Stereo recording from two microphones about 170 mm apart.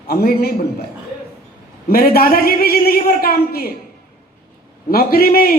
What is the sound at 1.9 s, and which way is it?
A man's voice, 60° left (ahead or behind).